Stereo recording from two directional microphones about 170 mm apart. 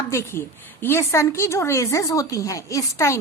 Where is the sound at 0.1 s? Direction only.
15° left (ahead or behind).